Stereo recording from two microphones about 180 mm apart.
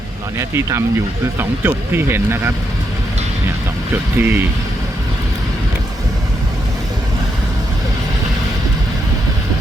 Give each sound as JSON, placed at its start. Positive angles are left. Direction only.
{"t": 0.3, "sound": "speech", "side_deg": -15}
{"t": 4.2, "sound": "speech", "side_deg": -10}